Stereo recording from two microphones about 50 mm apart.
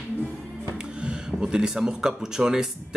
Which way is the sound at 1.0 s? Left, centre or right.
Centre.